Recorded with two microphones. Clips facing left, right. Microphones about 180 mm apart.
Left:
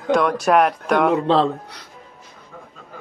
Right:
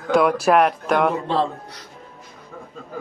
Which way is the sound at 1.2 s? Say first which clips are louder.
Left 5 dB; 70° left (ahead or behind).